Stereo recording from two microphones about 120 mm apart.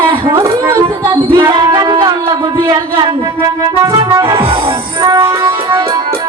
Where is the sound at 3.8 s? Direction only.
30° right (ahead or behind).